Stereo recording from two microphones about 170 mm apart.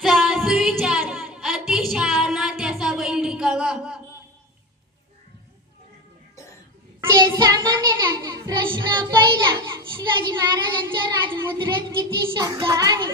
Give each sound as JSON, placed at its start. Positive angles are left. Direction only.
{"t": 0.0, "sound": "female singing", "side_deg": -5}
{"t": 7.2, "sound": "child singing", "side_deg": -25}
{"t": 12.3, "sound": "music", "side_deg": -20}